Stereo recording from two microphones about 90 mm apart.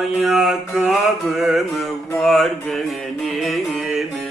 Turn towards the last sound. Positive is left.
turn(degrees=-5)  # may be behind; listen again after turning